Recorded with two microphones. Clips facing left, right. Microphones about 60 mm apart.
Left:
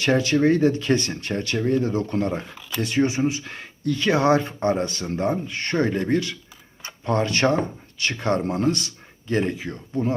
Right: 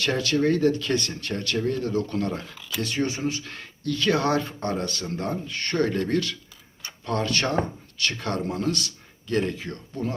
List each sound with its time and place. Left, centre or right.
0.0 s speech: left
2.6 s a sound: centre
2.8 s speech: centre
9.9 s speech: left